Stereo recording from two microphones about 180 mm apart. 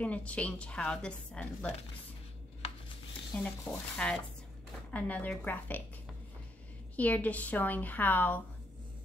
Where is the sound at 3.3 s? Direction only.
5° left (ahead or behind).